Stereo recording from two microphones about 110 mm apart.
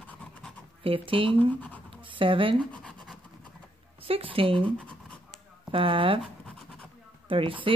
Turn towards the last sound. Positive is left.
turn(degrees=-55)  # may be behind; listen again after turning